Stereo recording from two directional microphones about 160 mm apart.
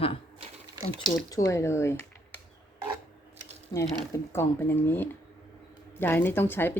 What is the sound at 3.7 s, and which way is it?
Speech, 25° left (ahead or behind).